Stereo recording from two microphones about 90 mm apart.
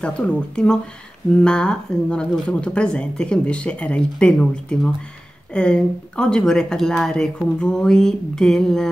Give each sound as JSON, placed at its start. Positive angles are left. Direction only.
{"t": 0.0, "sound": "a woman's voice", "side_deg": 10}